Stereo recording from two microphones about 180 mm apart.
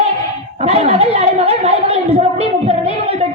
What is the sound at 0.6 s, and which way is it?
Chatter, 35° right (ahead or behind).